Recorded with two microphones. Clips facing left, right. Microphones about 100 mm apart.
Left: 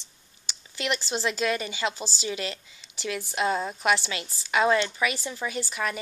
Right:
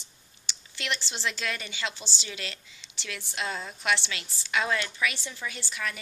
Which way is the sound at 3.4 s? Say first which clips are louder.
Left 6 dB; 30° left (ahead or behind).